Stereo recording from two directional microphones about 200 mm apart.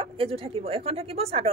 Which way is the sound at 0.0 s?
25° right (ahead or behind).